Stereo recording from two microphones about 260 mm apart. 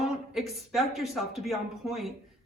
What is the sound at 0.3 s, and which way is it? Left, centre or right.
Speech, centre.